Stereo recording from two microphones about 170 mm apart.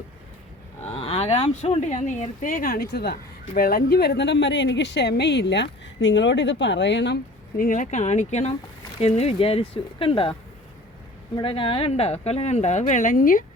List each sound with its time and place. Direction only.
0.9 s speech: 35° left (ahead or behind); by 7.2 s 90° left
7.5 s speech: 50° left (ahead or behind); by 10.3 s 30° left (ahead or behind)
11.3 s speech: 30° left (ahead or behind); by 13.4 s 55° left (ahead or behind)